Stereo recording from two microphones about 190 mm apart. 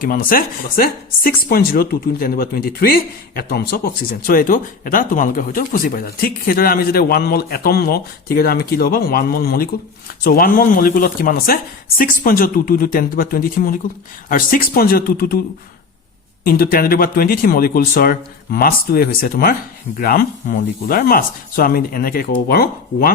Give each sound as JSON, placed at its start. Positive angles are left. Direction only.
{"t": 0.0, "sound": "speech", "side_deg": 50}
{"t": 16.4, "sound": "speech", "side_deg": 50}